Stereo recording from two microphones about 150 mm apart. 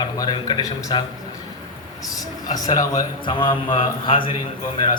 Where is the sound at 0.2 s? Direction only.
30° left (ahead or behind).